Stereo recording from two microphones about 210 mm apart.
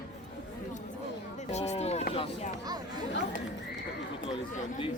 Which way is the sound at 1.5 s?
30° left (ahead or behind).